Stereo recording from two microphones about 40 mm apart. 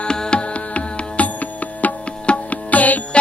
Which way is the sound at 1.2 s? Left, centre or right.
Left.